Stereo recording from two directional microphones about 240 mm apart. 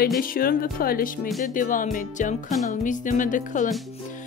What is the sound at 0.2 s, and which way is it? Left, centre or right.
Speech, left.